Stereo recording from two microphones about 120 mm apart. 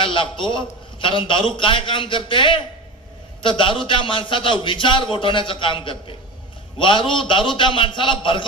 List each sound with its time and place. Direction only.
0.0 s a man's voice: 45° left (ahead or behind)